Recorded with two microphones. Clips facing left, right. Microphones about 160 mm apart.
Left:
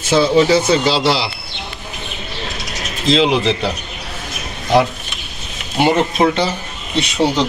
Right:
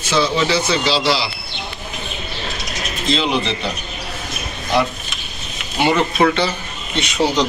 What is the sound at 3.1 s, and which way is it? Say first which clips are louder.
Speech: left 6 dB; 90° left.